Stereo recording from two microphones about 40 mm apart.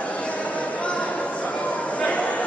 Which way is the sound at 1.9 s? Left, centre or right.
Left.